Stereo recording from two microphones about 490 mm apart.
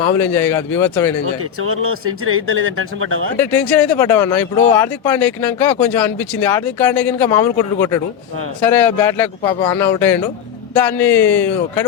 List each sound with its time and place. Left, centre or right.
0.2 s speech: centre
1.2 s speech: right
3.4 s speech: centre